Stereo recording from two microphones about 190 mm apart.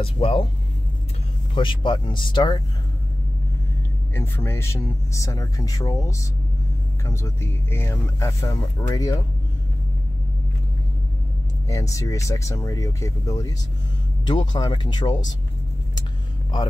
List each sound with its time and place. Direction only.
0.0 s speech: 30° left (ahead or behind)
1.5 s speech: 25° left (ahead or behind)
4.1 s speech: 15° left (ahead or behind)
11.7 s speech: 15° left (ahead or behind)